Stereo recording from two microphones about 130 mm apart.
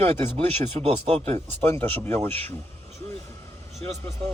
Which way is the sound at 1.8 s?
15° left (ahead or behind).